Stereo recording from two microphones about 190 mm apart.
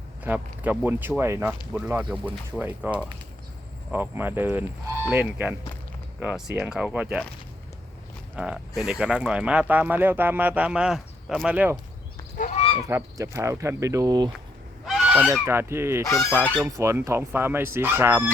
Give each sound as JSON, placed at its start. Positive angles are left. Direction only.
{"t": 0.3, "sound": "speech", "side_deg": -10}
{"t": 8.4, "sound": "speech", "side_deg": -5}
{"t": 12.4, "sound": "goose", "side_deg": 35}
{"t": 12.9, "sound": "speech", "side_deg": -15}
{"t": 14.8, "sound": "goose", "side_deg": -5}
{"t": 16.1, "sound": "speech", "side_deg": -5}